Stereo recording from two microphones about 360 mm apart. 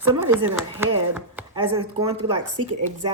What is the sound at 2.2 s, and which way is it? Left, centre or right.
Speech, right.